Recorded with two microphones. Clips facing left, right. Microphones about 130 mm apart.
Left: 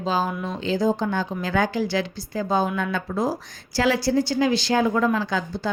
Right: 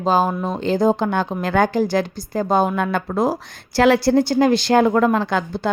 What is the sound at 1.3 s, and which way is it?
A woman's voice, 55° right (ahead or behind).